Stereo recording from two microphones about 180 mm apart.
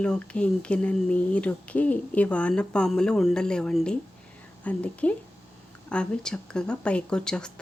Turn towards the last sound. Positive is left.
turn(degrees=5)  # may be behind; listen again after turning